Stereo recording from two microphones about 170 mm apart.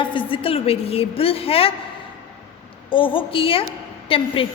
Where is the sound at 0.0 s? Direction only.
30° left (ahead or behind).